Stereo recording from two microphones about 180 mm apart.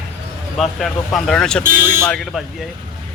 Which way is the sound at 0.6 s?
Centre (ahead or behind).